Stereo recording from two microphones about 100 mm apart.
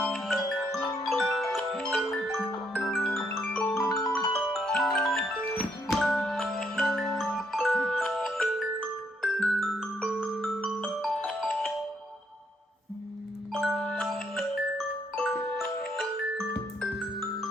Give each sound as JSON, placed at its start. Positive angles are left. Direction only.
{"t": 0.0, "sound": "music", "side_deg": 0}
{"t": 2.7, "sound": "marimba", "side_deg": 10}
{"t": 3.4, "sound": "music", "side_deg": 5}
{"t": 3.8, "sound": "music", "side_deg": 35}
{"t": 4.4, "sound": "marimba", "side_deg": 0}
{"t": 6.1, "sound": "music", "side_deg": 5}
{"t": 9.2, "sound": "marimba", "side_deg": 5}
{"t": 11.3, "sound": "music", "side_deg": 5}
{"t": 13.5, "sound": "music", "side_deg": 5}